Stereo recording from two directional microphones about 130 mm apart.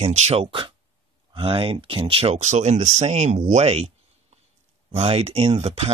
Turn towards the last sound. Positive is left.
turn(degrees=-50)  # may be behind; listen again after turning